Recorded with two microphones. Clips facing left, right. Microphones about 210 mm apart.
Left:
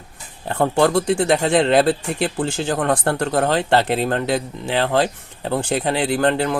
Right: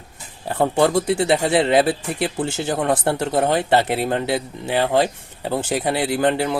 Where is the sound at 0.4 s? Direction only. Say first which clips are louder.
Left 1 dB; 10° right (ahead or behind).